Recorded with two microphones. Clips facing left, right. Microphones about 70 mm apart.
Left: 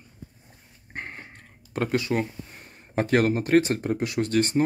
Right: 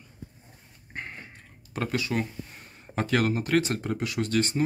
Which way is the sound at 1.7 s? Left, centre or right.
Left.